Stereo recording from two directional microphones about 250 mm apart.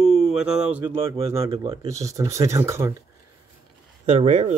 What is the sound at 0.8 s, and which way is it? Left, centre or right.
Speech, right.